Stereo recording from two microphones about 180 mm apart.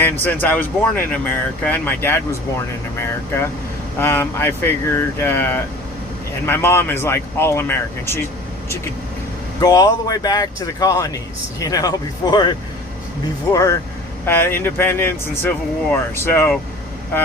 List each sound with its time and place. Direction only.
0.0 s speech: 10° left (ahead or behind)
4.0 s speech: 10° left (ahead or behind)
9.6 s speech: 20° left (ahead or behind)
13.5 s speech: 15° left (ahead or behind)